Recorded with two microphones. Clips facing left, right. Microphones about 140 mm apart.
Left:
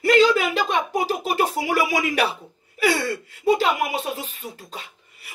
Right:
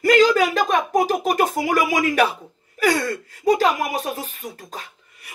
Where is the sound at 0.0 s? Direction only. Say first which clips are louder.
Right 2 dB; 40° right (ahead or behind).